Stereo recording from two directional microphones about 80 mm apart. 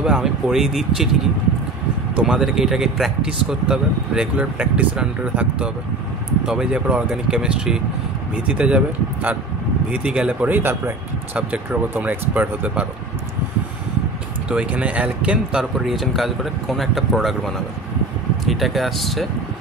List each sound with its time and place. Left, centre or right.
0.0 s speech: centre
2.1 s speech: centre
14.5 s speech: centre
15.8 s speech: centre